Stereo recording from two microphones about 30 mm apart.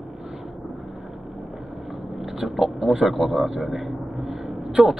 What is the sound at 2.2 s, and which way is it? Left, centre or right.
Speech, centre.